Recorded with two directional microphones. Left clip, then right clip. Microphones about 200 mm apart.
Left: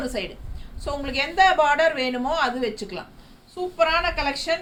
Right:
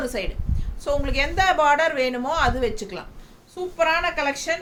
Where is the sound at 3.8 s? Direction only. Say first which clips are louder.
Even; 15° right (ahead or behind).